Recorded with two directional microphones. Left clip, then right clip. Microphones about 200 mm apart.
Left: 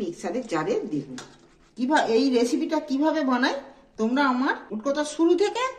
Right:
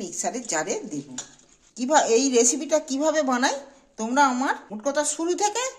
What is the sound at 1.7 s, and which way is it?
A woman's voice, 55° right (ahead or behind).